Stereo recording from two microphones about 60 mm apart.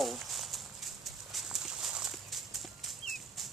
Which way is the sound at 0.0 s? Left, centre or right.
Centre.